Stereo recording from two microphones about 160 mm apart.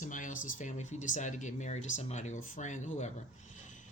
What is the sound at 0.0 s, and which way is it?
Speech, 55° left (ahead or behind).